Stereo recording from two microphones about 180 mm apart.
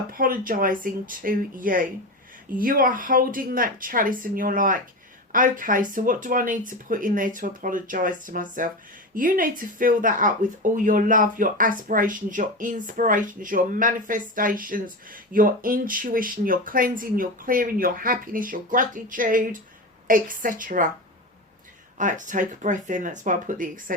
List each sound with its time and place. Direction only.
0.1 s speech: 50° right (ahead or behind)
21.9 s speech: 45° right (ahead or behind)